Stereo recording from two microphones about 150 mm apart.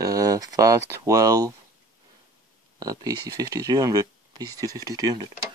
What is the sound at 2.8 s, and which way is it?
Speech, 25° right (ahead or behind).